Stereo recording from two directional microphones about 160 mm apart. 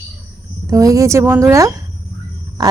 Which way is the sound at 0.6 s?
20° right (ahead or behind).